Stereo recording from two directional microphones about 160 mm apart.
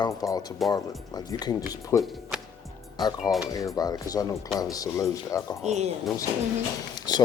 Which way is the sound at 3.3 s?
25° left (ahead or behind).